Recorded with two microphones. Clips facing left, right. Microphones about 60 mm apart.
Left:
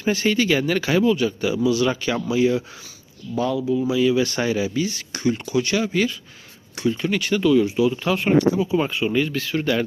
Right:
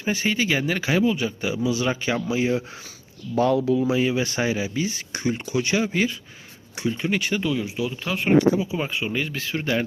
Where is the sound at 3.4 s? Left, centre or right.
Right.